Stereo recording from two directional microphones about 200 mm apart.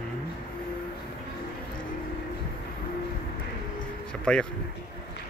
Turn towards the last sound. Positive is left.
turn(degrees=5)  # may be behind; listen again after turning